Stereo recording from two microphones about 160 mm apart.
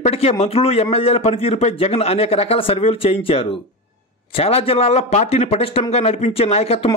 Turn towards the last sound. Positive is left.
turn(degrees=40)  # may be behind; listen again after turning